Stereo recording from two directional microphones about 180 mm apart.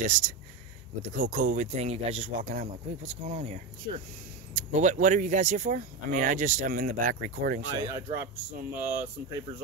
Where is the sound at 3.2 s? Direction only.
35° right (ahead or behind).